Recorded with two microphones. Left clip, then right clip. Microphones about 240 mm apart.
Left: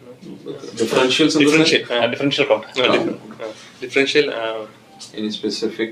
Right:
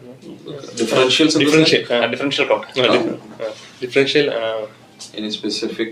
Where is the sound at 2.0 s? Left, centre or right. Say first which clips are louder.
Even; left.